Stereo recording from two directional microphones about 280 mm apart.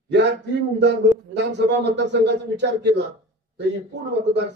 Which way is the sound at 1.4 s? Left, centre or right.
Right.